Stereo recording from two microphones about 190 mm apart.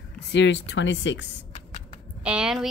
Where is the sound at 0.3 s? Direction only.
70° left (ahead or behind).